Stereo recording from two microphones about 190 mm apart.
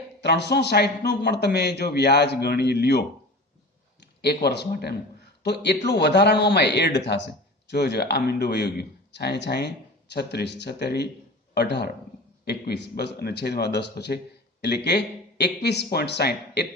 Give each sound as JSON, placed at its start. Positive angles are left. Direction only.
{"t": 0.2, "sound": "a man's voice", "side_deg": 65}
{"t": 4.2, "sound": "a man's voice", "side_deg": 60}